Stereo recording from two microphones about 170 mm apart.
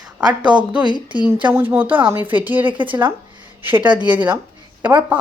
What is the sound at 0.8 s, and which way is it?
Speech, 25° right (ahead or behind).